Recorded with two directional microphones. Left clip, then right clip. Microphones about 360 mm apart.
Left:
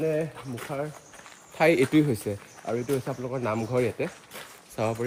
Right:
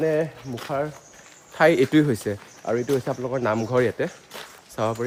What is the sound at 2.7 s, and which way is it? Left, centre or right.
Speech, right.